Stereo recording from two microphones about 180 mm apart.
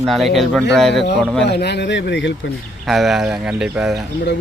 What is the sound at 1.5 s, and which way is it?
Speech, 70° left (ahead or behind).